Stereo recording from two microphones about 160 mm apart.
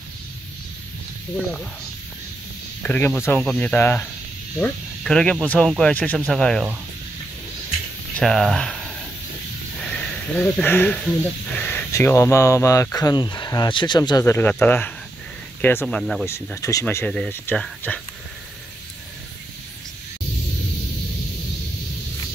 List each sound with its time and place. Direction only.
2.8 s speech: 10° left (ahead or behind)
8.2 s speech: centre (ahead or behind)
9.8 s a sound: 5° left (ahead or behind)
11.5 s speech: 10° left (ahead or behind)
16.0 s speech: centre (ahead or behind)
16.6 s speech: 20° left (ahead or behind)